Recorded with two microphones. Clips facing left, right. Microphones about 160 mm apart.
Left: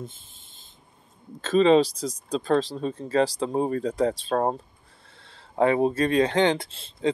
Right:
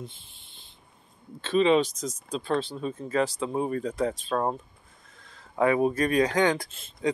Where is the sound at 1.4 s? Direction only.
40° left (ahead or behind).